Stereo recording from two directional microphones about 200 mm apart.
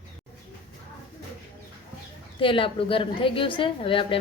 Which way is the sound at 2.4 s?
25° left (ahead or behind).